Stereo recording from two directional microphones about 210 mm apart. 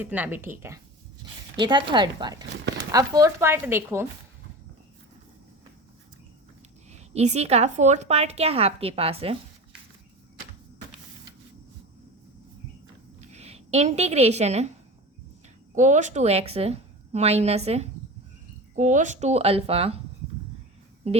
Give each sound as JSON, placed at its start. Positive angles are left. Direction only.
{"t": 0.0, "sound": "speech", "side_deg": -10}
{"t": 7.1, "sound": "a woman's voice", "side_deg": -30}
{"t": 13.3, "sound": "a woman's voice", "side_deg": -30}
{"t": 15.7, "sound": "a woman's voice", "side_deg": -35}